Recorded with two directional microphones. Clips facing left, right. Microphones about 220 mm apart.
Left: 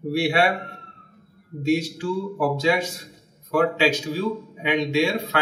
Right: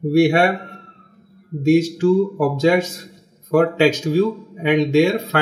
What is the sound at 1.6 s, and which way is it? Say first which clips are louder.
Speech: right 8 dB; 45° right (ahead or behind).